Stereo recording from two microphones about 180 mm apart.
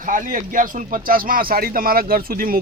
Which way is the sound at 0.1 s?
50° right (ahead or behind).